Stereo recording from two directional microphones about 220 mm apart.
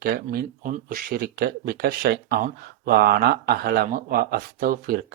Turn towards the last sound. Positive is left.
turn(degrees=-40)  # may be behind; listen again after turning